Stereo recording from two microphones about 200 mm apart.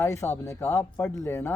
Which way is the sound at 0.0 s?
10° left (ahead or behind).